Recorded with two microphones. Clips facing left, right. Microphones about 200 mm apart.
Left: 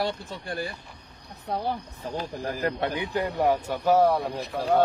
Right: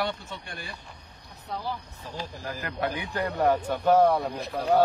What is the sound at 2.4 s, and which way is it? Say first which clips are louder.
Speech: left 3 dB; 35° left (ahead or behind).